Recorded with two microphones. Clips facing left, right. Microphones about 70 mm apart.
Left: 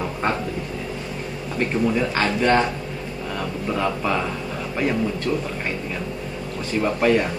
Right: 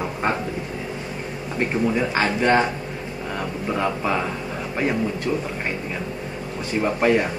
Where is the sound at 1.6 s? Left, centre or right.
Right.